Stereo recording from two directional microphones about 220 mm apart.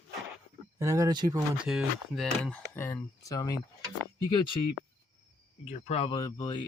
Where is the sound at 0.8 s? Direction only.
15° right (ahead or behind).